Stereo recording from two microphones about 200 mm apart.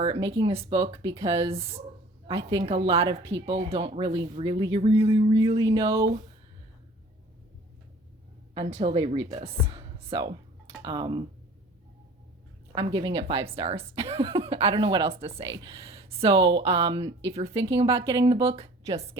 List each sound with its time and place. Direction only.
0.3 s speech: 25° right (ahead or behind)
5.5 s speech: 15° right (ahead or behind)
8.5 s speech: 30° right (ahead or behind)
12.7 s speech: 25° right (ahead or behind)